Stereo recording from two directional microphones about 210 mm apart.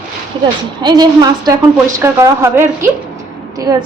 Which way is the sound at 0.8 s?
20° right (ahead or behind).